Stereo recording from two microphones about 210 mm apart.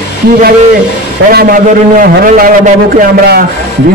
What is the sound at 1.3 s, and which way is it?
A man's voice, 45° right (ahead or behind).